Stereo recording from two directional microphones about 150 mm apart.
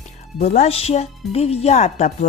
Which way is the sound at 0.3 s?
50° left (ahead or behind).